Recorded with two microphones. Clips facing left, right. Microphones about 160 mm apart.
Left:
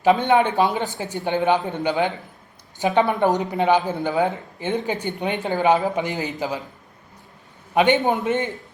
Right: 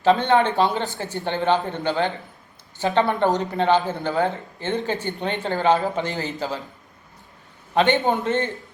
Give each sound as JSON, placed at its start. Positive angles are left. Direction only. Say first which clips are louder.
{"t": 0.3, "sound": "a woman's voice", "louder": "left 1 dB", "side_deg": 15}
{"t": 7.9, "sound": "a man's voice", "louder": "left 1 dB", "side_deg": 20}